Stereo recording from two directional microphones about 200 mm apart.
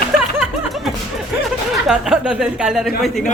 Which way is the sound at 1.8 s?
5° right (ahead or behind).